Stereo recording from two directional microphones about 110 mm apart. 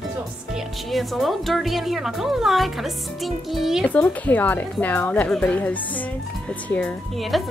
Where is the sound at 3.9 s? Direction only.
15° left (ahead or behind).